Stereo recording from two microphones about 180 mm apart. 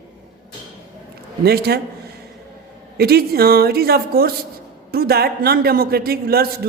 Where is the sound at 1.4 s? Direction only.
60° right (ahead or behind).